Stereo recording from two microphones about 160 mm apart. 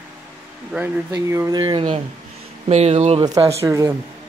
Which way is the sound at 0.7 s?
15° right (ahead or behind).